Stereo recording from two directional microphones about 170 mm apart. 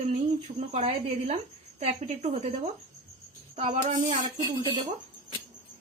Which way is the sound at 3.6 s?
35° right (ahead or behind).